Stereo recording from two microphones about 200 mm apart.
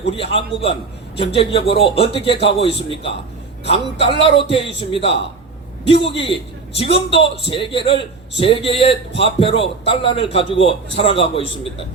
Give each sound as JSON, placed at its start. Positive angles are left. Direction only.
{"t": 0.0, "sound": "a man's voice", "side_deg": 25}